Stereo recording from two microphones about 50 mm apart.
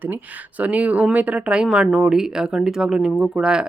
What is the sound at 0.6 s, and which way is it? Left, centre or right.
Speech, right.